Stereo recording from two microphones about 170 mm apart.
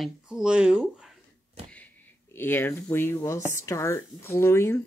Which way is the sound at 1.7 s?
10° left (ahead or behind).